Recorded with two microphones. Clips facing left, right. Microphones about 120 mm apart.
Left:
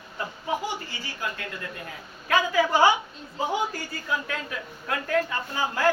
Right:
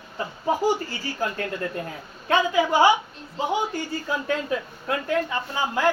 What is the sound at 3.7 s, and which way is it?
Speech, 30° right (ahead or behind).